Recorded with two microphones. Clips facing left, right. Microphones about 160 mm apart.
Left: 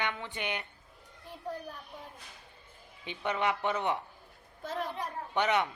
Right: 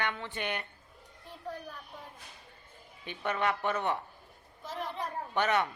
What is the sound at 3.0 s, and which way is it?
Speech, 15° left (ahead or behind).